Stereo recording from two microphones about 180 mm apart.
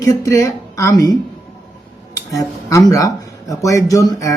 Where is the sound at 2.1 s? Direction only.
20° left (ahead or behind).